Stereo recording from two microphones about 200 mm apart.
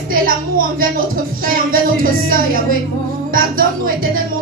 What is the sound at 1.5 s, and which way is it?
Speech, 45° right (ahead or behind).